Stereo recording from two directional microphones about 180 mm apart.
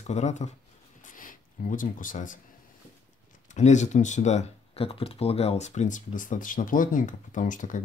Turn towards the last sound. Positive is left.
turn(degrees=45)  # may be behind; listen again after turning